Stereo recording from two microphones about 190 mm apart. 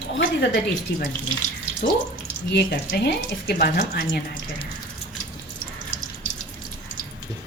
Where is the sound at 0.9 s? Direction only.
65° left (ahead or behind).